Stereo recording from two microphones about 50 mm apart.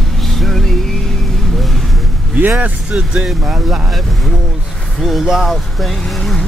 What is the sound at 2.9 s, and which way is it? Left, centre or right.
Speech, centre.